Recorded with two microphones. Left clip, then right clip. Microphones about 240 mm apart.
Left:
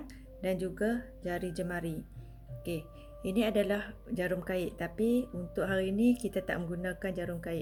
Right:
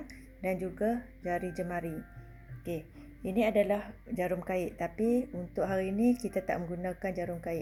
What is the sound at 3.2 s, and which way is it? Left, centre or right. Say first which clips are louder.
Speech: right 2 dB; left.